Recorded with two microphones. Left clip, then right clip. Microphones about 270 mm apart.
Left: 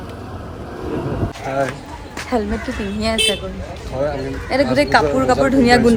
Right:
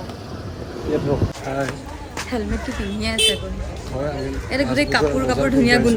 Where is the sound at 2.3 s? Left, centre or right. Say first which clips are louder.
Left 7 dB; centre.